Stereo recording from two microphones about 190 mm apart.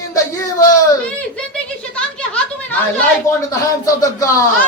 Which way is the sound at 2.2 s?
5° left (ahead or behind).